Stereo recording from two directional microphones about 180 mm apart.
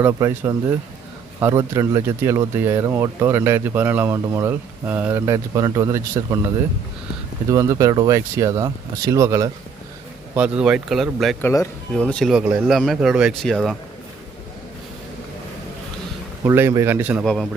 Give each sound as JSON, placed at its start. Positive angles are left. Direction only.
{"t": 0.0, "sound": "speech", "side_deg": -15}
{"t": 7.5, "sound": "speech", "side_deg": -15}
{"t": 11.4, "sound": "speech", "side_deg": 15}
{"t": 12.0, "sound": "speech", "side_deg": 5}
{"t": 16.4, "sound": "speech", "side_deg": -15}